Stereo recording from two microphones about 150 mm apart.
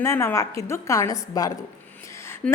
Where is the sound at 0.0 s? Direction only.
15° left (ahead or behind).